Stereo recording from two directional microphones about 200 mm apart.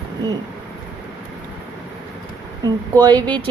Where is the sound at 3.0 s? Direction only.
20° right (ahead or behind).